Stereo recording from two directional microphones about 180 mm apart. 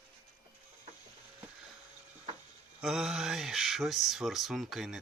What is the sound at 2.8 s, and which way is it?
Speech, 5° right (ahead or behind).